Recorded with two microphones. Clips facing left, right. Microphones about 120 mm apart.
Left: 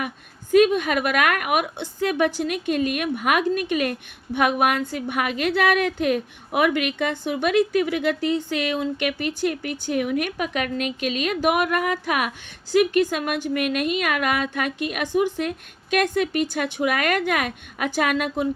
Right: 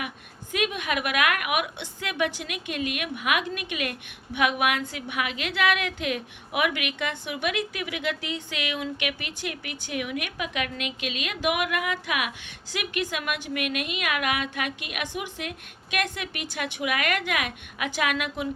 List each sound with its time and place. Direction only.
0.5 s a woman's voice: 40° left (ahead or behind)